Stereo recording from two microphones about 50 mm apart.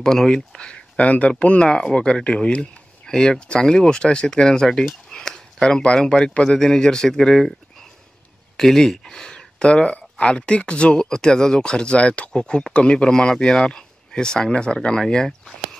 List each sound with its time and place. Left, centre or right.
0.0 s speech: centre
8.5 s speech: centre